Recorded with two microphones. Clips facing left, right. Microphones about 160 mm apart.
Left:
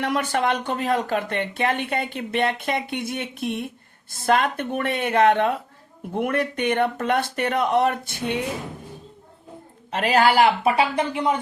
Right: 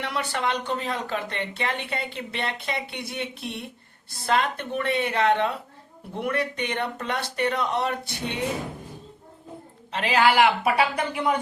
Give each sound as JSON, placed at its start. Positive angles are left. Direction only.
{"t": 0.0, "sound": "speech", "side_deg": 50}
{"t": 9.9, "sound": "speech", "side_deg": 45}